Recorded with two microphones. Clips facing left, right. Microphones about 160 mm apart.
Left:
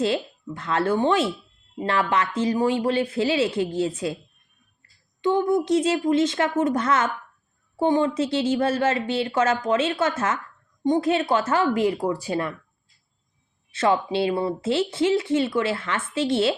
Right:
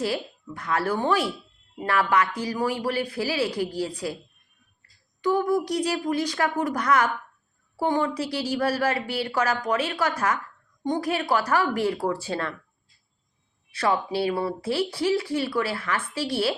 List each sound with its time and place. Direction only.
0.0 s speech: 25° left (ahead or behind)
5.2 s speech: 25° left (ahead or behind)
13.7 s speech: 25° left (ahead or behind)